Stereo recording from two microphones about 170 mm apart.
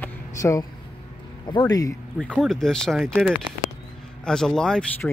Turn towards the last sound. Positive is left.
turn(degrees=5)  # may be behind; listen again after turning